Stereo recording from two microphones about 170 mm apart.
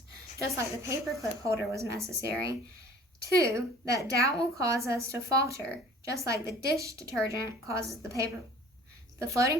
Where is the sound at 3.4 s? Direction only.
20° right (ahead or behind).